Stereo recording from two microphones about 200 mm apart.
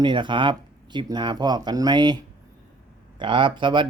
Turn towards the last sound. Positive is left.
turn(degrees=-25)  # may be behind; listen again after turning